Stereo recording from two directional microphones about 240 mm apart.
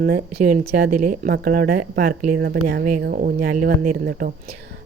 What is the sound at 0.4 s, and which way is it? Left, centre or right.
Speech, right.